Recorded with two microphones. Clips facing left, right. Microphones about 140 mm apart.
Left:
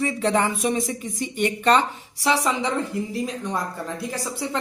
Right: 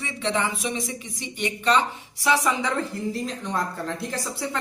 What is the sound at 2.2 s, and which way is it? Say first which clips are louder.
Speech: left 1 dB; 25° left (ahead or behind).